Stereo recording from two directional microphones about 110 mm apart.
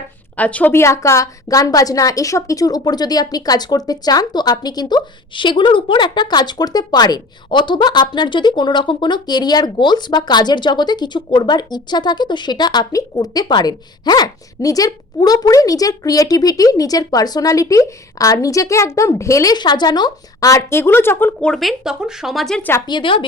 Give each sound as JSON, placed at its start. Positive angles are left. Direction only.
{"t": 0.3, "sound": "a woman's voice", "side_deg": 15}
{"t": 21.5, "sound": "speech", "side_deg": 0}
{"t": 22.9, "sound": "a woman's voice", "side_deg": 50}